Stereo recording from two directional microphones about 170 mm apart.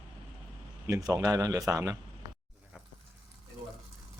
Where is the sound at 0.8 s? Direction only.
20° right (ahead or behind).